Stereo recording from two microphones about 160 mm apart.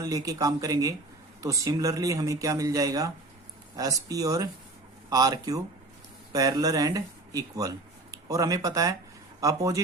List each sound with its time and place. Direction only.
0.0 s speech: 20° right (ahead or behind)